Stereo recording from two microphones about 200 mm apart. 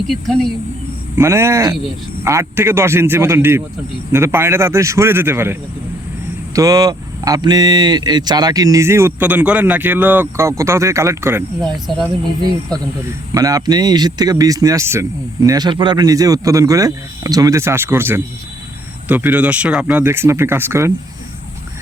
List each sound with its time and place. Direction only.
0.1 s speech: centre (ahead or behind)
1.1 s speech: 15° right (ahead or behind)
11.6 s speech: centre (ahead or behind)
13.3 s speech: 20° right (ahead or behind)